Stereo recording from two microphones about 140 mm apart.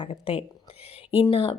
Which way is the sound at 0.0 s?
40° left (ahead or behind).